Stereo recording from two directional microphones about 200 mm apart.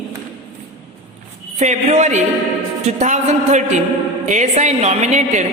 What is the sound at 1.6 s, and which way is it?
A woman's voice, 35° right (ahead or behind).